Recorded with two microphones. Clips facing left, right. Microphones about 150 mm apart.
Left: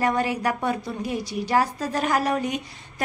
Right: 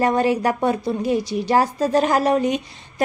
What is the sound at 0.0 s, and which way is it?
A woman's voice, 30° right (ahead or behind).